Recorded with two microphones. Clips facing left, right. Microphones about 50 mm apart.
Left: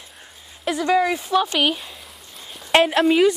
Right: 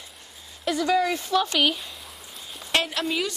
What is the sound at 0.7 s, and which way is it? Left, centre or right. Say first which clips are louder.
Speech: left 3 dB; centre.